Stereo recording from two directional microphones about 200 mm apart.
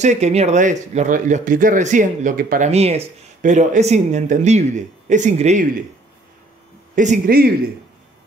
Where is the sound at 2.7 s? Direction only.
30° right (ahead or behind).